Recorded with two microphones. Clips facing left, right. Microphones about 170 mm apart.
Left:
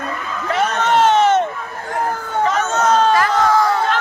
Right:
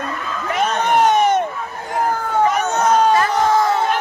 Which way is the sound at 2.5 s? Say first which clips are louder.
Left 4 dB; 15° right (ahead or behind).